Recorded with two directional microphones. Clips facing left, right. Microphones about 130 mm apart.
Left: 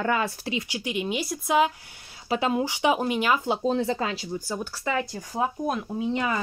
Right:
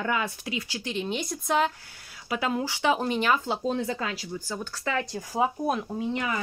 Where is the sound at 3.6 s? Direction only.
30° left (ahead or behind).